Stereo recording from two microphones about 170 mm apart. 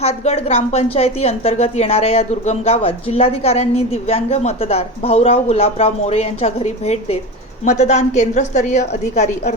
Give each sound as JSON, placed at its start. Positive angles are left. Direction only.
{"t": 0.0, "sound": "a woman's voice", "side_deg": 35}